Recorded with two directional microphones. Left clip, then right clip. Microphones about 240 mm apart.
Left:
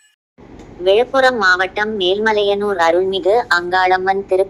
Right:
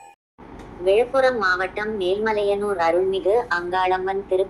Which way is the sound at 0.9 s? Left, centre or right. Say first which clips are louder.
Left 5 dB; centre.